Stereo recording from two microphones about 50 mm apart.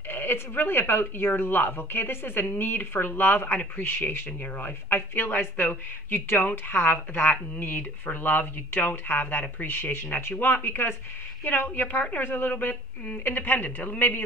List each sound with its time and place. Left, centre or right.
0.1 s speech: left
11.4 s speech: left
12.2 s speech: left